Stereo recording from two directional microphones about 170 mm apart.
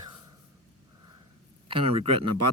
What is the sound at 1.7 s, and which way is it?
Speech, 30° right (ahead or behind).